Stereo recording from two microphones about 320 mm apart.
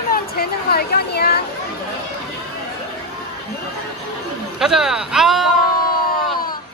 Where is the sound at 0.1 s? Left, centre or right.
Left.